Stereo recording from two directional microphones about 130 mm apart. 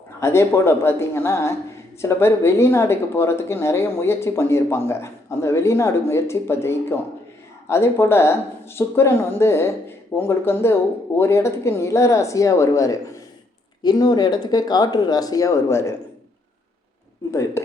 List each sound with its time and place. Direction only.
0.2 s speech: 20° left (ahead or behind)